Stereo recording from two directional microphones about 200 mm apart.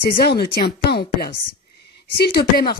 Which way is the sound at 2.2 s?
50° left (ahead or behind).